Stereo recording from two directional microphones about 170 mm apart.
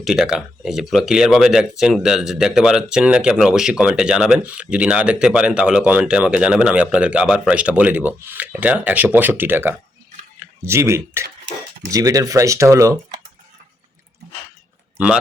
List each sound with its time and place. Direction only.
0.0 s speech: centre (ahead or behind); by 13.0 s 20° right (ahead or behind)
14.9 s speech: 5° right (ahead or behind)